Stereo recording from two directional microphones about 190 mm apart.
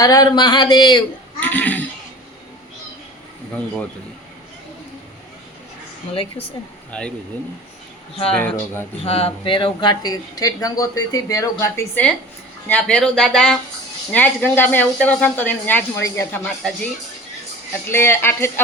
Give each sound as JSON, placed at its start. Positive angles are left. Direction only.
{"t": 0.0, "sound": "speech", "side_deg": 20}
{"t": 1.4, "sound": "a child's voice", "side_deg": 10}
{"t": 6.9, "sound": "speech", "side_deg": 5}
{"t": 8.3, "sound": "speech", "side_deg": 10}
{"t": 9.0, "sound": "speech", "side_deg": 30}
{"t": 17.8, "sound": "speech", "side_deg": 10}